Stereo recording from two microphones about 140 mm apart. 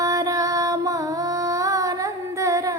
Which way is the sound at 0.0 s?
25° right (ahead or behind).